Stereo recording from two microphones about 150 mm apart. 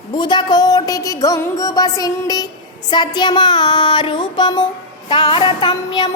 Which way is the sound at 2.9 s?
30° left (ahead or behind).